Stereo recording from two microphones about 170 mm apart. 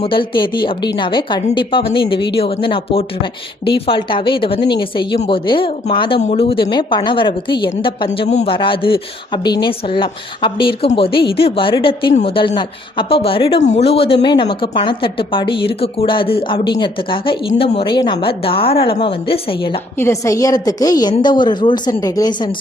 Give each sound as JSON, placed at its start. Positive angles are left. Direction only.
{"t": 0.0, "sound": "a woman's voice", "side_deg": 30}
{"t": 20.0, "sound": "a woman's voice", "side_deg": 15}